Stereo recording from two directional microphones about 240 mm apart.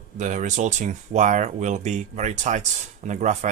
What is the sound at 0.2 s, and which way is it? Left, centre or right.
Speech, right.